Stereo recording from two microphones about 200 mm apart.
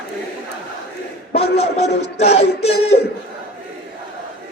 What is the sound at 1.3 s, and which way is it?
A man's voice, 30° left (ahead or behind).